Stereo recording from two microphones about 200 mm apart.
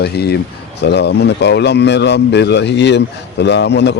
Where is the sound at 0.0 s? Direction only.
50° left (ahead or behind).